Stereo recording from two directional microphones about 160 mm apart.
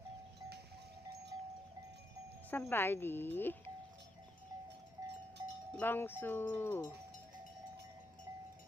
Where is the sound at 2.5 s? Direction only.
10° left (ahead or behind).